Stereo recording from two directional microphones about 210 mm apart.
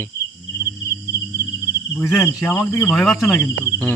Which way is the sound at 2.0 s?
10° left (ahead or behind).